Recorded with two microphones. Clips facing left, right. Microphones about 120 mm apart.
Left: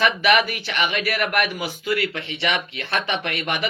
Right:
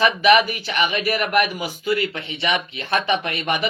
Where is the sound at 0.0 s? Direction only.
15° right (ahead or behind).